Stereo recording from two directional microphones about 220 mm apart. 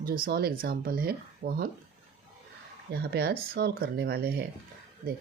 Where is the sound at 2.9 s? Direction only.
50° right (ahead or behind).